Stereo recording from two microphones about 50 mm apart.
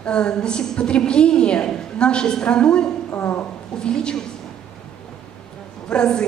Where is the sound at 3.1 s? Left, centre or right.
Left.